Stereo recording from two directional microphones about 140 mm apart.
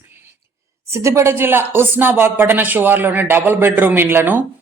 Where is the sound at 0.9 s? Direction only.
20° right (ahead or behind).